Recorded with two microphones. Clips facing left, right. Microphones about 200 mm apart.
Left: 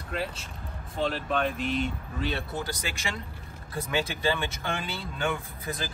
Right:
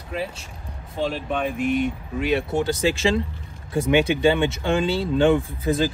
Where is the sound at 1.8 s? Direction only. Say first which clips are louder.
Right 6 dB; 15° right (ahead or behind).